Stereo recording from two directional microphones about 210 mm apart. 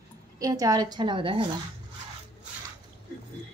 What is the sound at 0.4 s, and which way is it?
A woman's voice, 15° right (ahead or behind).